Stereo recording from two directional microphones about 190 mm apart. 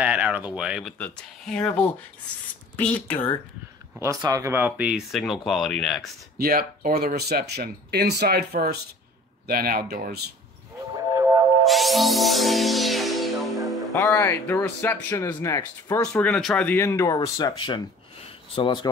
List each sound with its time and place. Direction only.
0.0 s speech: 10° right (ahead or behind)
0.9 s speech: 5° left (ahead or behind)
4.0 s speech: 15° right (ahead or behind); by 6.0 s 5° left (ahead or behind)
6.3 s speech: 50° right (ahead or behind)
11.1 s music: 15° right (ahead or behind)
11.6 s music: centre (ahead or behind)
13.9 s speech: 10° left (ahead or behind)
16.0 s speech: 5° left (ahead or behind); by 18.9 s 25° left (ahead or behind)